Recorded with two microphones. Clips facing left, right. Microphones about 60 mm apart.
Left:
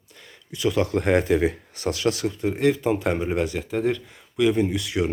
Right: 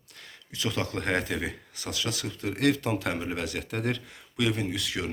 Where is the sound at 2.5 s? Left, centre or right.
Centre.